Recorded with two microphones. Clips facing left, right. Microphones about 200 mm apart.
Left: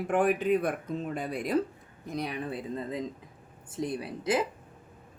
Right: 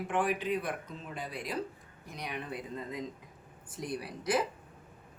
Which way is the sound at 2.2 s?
30° left (ahead or behind).